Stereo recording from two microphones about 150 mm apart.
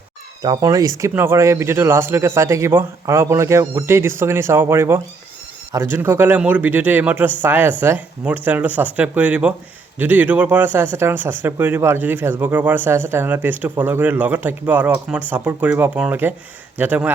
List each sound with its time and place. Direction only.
0.4 s speech: 25° right (ahead or behind)